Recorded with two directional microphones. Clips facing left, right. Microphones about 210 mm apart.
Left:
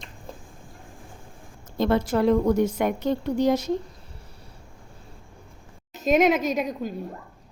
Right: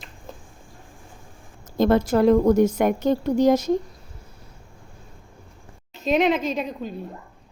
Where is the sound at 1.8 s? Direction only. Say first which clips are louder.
Right 4 dB; 45° right (ahead or behind).